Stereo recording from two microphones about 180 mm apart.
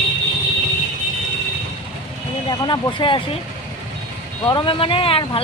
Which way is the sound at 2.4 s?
25° left (ahead or behind).